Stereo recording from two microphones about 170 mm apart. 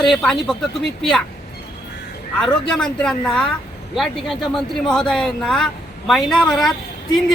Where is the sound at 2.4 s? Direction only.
5° left (ahead or behind).